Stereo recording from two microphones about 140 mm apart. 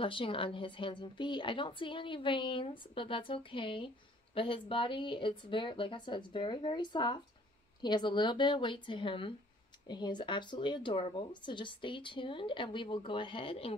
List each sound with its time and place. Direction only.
0.0 s a woman's voice: 40° left (ahead or behind)